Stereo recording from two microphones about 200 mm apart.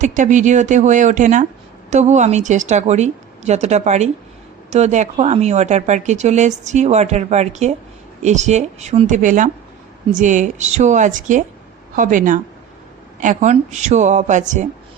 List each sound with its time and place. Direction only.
0.0 s a woman's voice: 40° right (ahead or behind)